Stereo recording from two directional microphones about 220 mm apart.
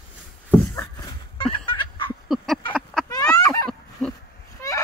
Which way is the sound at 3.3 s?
15° left (ahead or behind).